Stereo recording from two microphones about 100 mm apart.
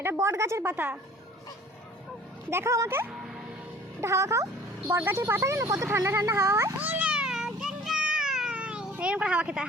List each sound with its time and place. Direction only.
0.0 s a woman's voice: 25° right (ahead or behind)
2.5 s a woman's voice: 30° right (ahead or behind); by 9.6 s 10° right (ahead or behind)